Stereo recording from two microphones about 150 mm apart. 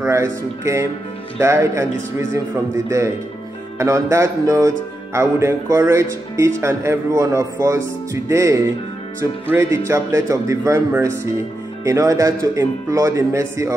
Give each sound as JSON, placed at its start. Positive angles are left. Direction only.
{"t": 0.0, "sound": "speech", "side_deg": -20}
{"t": 3.7, "sound": "speech", "side_deg": -20}